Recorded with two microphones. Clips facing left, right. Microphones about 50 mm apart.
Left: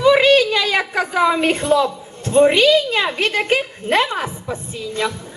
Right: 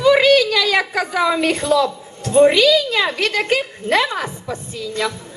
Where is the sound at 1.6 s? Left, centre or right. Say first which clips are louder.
Even; left.